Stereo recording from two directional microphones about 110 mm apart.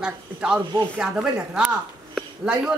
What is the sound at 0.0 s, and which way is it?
A woman's voice, 10° right (ahead or behind).